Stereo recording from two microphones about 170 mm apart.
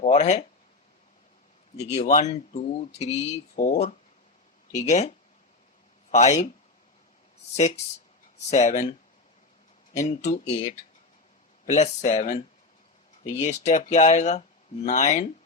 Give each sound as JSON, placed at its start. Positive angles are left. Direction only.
{"t": 0.0, "sound": "speech", "side_deg": 40}
{"t": 2.0, "sound": "speech", "side_deg": 45}
{"t": 7.5, "sound": "speech", "side_deg": 40}
{"t": 10.0, "sound": "speech", "side_deg": 40}
{"t": 13.4, "sound": "speech", "side_deg": 40}